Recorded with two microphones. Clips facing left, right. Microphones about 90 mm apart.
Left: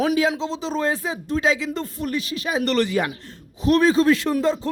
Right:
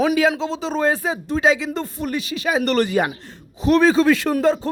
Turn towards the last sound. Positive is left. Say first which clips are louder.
# right 2 dB
turn(degrees=-55)  # may be behind; listen again after turning